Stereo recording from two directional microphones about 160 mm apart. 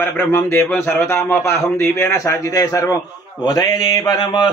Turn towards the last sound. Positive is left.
turn(degrees=25)  # may be behind; listen again after turning